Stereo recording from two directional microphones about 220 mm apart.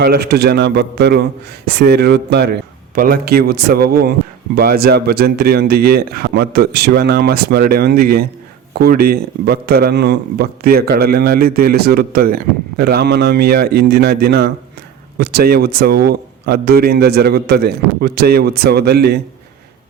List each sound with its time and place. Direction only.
0.0 s a man's voice: 45° right (ahead or behind)